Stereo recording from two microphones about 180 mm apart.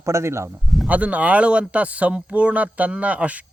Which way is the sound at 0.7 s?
5° right (ahead or behind).